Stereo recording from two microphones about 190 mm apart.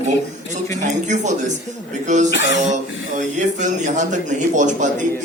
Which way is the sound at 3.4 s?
40° right (ahead or behind).